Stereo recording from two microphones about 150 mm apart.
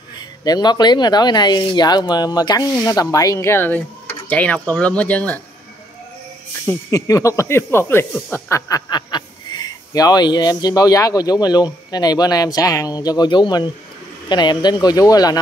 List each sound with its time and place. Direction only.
0.4 s speech: 25° left (ahead or behind); by 5.4 s 10° left (ahead or behind)
6.7 s speech: 20° left (ahead or behind)